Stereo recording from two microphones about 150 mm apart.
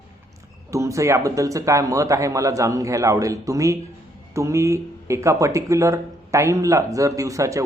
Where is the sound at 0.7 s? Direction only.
20° right (ahead or behind).